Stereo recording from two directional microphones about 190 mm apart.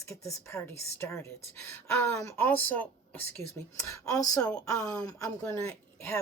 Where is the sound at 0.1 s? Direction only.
15° left (ahead or behind).